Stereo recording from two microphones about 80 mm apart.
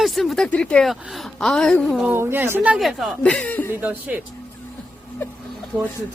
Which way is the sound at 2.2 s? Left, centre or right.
Right.